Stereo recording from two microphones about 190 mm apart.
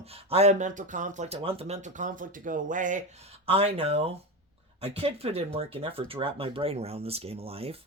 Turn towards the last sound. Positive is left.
turn(degrees=-30)  # may be behind; listen again after turning